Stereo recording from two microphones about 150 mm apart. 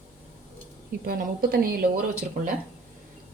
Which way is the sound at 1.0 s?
90° right.